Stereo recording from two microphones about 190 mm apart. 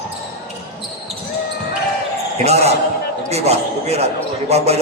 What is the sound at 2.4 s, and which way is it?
A man's voice, 35° right (ahead or behind).